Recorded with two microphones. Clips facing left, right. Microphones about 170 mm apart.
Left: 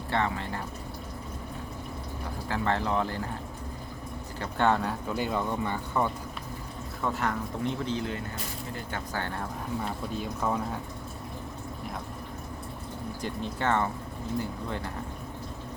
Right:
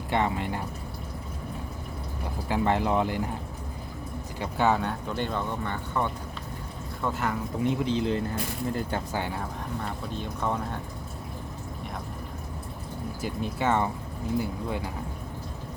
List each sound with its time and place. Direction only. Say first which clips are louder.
0.1 s speech: right 3 dB; 15° right (ahead or behind)
2.5 s speech: right 4 dB; 15° right (ahead or behind)
4.4 s speech: right 1 dB; 5° right (ahead or behind)
7.0 s speech: right 1 dB; centre (ahead or behind); by 8.2 s 20° right (ahead or behind)
9.1 s speech: right 2 dB; 10° right (ahead or behind)
9.8 s speech: left 1 dB; 5° left (ahead or behind)
13.2 s speech: right 2 dB; 10° right (ahead or behind)